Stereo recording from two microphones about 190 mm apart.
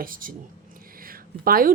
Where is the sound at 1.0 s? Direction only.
50° right (ahead or behind).